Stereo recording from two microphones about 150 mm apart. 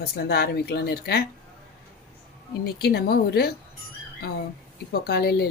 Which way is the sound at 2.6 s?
90° left.